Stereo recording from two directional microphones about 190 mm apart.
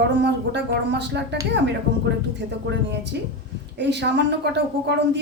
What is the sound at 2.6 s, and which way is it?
Speech, 65° right (ahead or behind).